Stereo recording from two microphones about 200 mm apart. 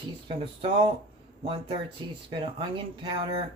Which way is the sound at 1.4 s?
25° right (ahead or behind).